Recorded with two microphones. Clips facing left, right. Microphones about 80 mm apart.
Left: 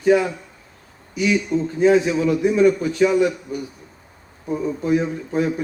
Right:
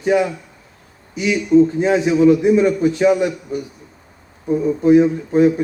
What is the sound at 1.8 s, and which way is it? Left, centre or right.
A man's voice, right.